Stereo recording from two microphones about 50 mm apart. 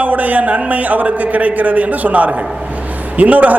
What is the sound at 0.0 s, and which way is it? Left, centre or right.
A man's voice, right.